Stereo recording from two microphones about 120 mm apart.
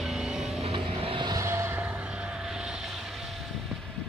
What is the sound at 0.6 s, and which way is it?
Vehicle, 50° right (ahead or behind).